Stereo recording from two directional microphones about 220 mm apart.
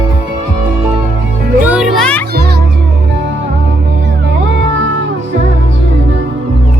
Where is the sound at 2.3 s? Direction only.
45° right (ahead or behind).